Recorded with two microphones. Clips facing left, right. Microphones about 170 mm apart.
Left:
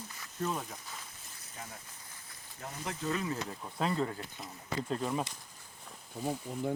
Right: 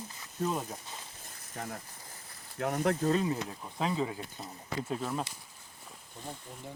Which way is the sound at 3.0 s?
35° right (ahead or behind).